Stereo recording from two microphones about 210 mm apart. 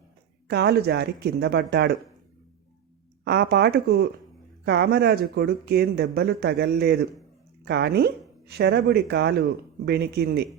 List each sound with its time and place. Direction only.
0.4 s speech: 50° right (ahead or behind)
3.2 s speech: 50° right (ahead or behind)